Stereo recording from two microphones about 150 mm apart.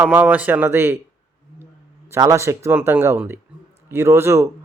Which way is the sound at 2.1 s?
20° right (ahead or behind).